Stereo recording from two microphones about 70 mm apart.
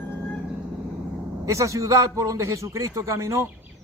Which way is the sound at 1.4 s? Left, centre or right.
Right.